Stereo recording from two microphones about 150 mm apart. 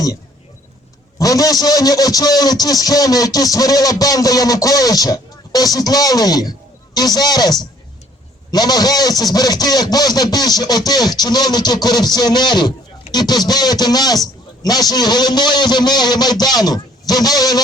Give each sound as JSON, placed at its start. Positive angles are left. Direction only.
{"t": 1.2, "sound": "a man's voice", "side_deg": 25}